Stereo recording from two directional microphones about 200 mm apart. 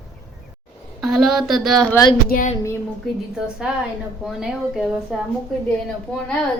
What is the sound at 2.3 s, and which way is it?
Speech, 40° left (ahead or behind).